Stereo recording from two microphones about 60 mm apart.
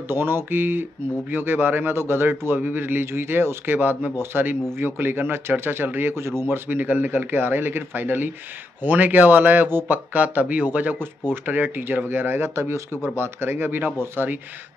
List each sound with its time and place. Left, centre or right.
0.1 s speech: right